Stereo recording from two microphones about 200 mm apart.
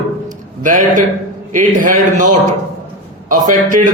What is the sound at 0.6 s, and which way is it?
A man's voice, 40° right (ahead or behind).